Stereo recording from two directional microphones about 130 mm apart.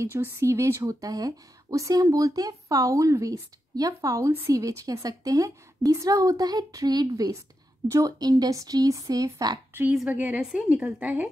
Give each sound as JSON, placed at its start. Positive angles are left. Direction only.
{"t": 0.0, "sound": "speech", "side_deg": -20}
{"t": 9.9, "sound": "a woman's voice", "side_deg": -10}